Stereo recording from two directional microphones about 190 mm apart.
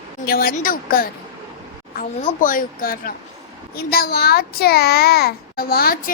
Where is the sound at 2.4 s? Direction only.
45° left (ahead or behind).